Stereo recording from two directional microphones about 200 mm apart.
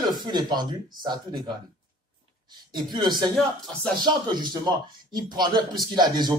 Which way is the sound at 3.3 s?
Centre (ahead or behind).